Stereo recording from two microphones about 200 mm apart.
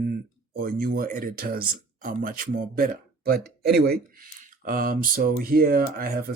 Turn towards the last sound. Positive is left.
turn(degrees=-50)  # may be behind; listen again after turning